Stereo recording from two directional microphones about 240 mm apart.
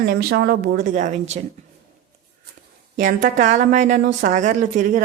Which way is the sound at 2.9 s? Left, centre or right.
Right.